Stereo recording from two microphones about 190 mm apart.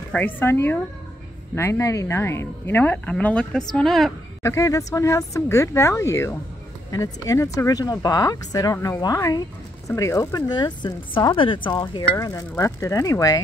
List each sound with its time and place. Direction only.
0.1 s a woman's voice: 10° left (ahead or behind)
4.4 s a woman's voice: 15° left (ahead or behind)